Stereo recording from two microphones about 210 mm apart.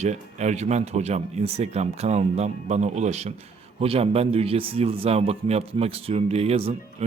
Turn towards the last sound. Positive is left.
turn(degrees=-30)  # may be behind; listen again after turning